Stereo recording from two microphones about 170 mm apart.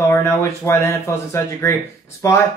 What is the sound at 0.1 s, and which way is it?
Speech, 15° left (ahead or behind).